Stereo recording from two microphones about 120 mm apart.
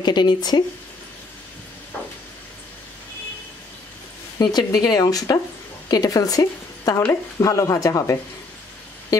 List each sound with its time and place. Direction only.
0.0 s speech: 35° left (ahead or behind)
4.4 s speech: 35° left (ahead or behind)